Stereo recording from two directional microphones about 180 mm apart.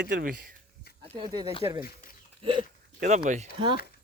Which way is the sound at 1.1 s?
25° right (ahead or behind).